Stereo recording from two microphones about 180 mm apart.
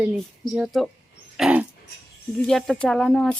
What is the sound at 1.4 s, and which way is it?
Dog, 5° right (ahead or behind).